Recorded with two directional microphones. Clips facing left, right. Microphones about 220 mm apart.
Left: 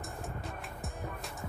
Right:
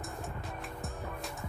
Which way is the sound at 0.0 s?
Centre (ahead or behind).